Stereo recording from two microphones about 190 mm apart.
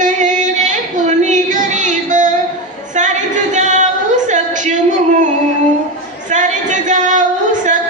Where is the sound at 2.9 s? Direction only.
40° right (ahead or behind).